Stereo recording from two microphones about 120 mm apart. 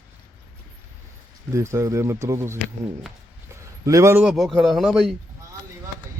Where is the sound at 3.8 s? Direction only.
25° right (ahead or behind).